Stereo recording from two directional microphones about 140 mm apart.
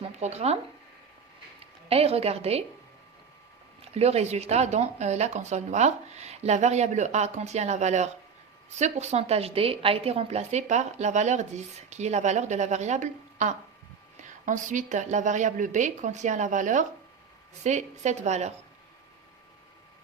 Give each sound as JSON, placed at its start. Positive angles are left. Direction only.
{"t": 0.0, "sound": "speech", "side_deg": -50}
{"t": 1.9, "sound": "speech", "side_deg": -45}
{"t": 3.8, "sound": "a woman's voice", "side_deg": -50}